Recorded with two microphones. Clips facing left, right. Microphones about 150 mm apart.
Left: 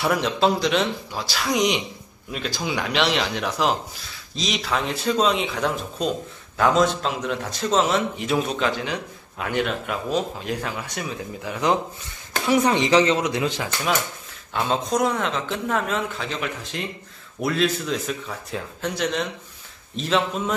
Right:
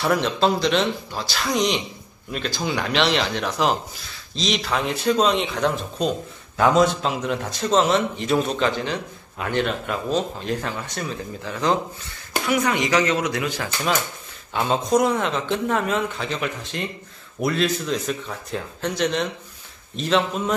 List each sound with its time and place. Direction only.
0.0 s speech: 5° left (ahead or behind)
12.4 s speech: 30° left (ahead or behind)
14.5 s speech: centre (ahead or behind)